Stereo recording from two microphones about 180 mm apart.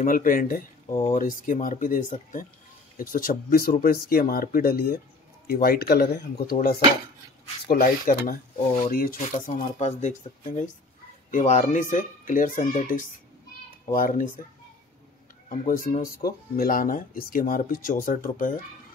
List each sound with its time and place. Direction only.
0.0 s speech: 50° left (ahead or behind)
7.6 s speech: 55° left (ahead or behind)
15.5 s speech: 50° left (ahead or behind)